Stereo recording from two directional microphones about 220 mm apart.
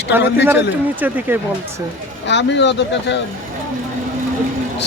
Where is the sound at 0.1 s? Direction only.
10° right (ahead or behind).